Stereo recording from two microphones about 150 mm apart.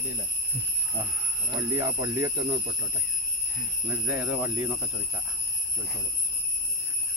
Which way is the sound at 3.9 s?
10° right (ahead or behind).